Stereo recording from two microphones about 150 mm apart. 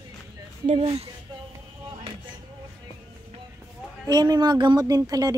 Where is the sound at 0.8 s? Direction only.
40° right (ahead or behind).